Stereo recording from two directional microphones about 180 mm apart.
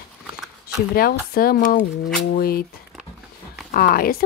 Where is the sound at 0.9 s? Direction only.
55° left (ahead or behind).